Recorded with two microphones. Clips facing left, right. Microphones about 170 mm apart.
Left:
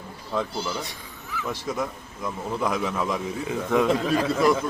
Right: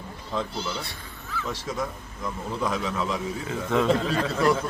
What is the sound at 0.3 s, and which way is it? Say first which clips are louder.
Speech: left 2 dB; 10° left (ahead or behind).